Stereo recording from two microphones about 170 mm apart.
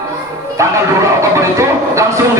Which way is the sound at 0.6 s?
15° right (ahead or behind).